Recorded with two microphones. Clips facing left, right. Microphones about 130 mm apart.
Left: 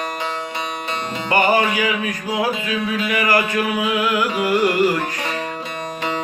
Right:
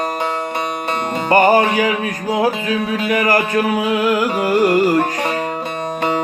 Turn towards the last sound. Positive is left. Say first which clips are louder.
# right 4 dB
turn(degrees=-40)  # may be behind; listen again after turning